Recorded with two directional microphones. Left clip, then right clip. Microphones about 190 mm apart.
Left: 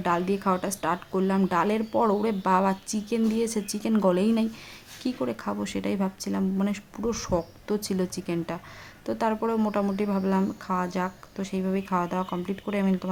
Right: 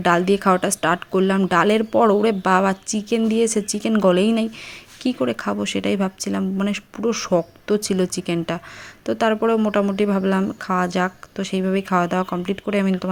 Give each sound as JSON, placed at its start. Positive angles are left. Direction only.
{"t": 0.0, "sound": "speech", "side_deg": -25}